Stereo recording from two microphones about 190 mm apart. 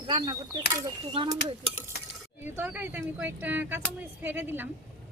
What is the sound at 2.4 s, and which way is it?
Speech, 10° right (ahead or behind).